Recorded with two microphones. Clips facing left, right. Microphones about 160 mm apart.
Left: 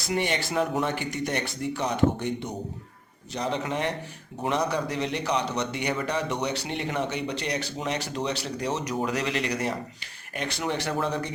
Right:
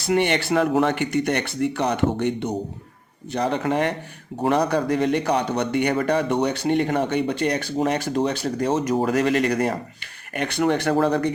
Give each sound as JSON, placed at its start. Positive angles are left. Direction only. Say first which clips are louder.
{"t": 0.1, "sound": "a man's voice", "louder": "right 7 dB", "side_deg": -65}